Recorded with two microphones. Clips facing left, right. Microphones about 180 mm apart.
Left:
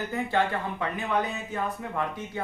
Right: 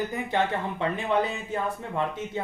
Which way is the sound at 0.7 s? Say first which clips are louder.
Right 4 dB; 30° right (ahead or behind).